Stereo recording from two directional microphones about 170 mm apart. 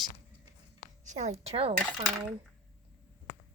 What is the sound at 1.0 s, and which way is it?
Speech, 45° right (ahead or behind).